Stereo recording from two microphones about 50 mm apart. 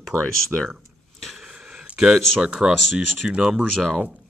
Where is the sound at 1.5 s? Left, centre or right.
Centre.